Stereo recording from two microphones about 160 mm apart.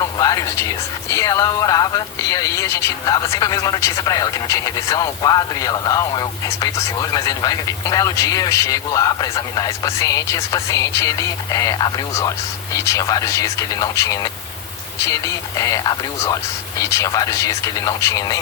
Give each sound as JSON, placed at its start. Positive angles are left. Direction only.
{"t": 0.0, "sound": "speech", "side_deg": 25}